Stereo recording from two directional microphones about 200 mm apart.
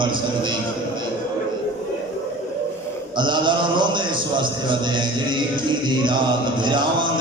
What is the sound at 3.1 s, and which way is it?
A man's voice, 25° right (ahead or behind).